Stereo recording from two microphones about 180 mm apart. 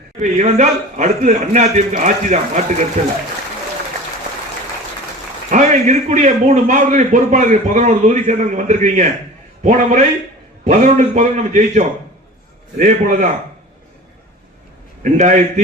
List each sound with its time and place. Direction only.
0.2 s a man's voice: 40° right (ahead or behind)
5.5 s a man's voice: 45° right (ahead or behind)
15.0 s a man's voice: 40° right (ahead or behind)